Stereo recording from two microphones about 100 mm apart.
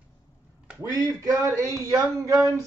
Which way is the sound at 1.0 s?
35° right (ahead or behind).